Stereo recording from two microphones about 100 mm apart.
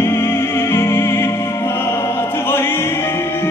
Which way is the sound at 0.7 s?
25° left (ahead or behind).